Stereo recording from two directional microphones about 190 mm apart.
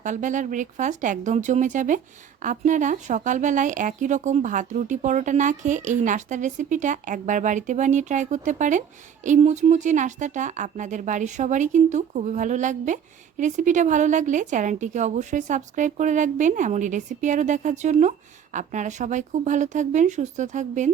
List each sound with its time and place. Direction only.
0.0 s speech: 40° right (ahead or behind)